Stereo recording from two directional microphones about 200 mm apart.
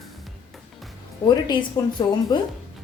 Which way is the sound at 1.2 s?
20° left (ahead or behind).